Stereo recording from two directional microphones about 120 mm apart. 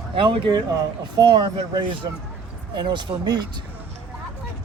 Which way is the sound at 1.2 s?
35° right (ahead or behind).